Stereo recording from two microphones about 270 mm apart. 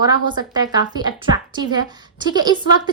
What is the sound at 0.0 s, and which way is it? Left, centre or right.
A woman's voice, centre.